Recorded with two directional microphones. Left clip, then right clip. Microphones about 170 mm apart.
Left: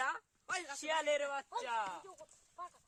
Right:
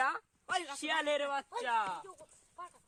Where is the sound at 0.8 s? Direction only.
45° right (ahead or behind).